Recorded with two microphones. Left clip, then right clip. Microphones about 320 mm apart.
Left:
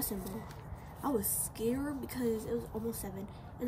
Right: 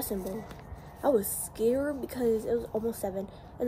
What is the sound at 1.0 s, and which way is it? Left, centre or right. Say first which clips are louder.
Speech: right 9 dB; centre.